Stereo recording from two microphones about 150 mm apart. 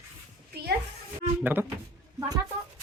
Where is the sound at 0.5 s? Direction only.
90° right.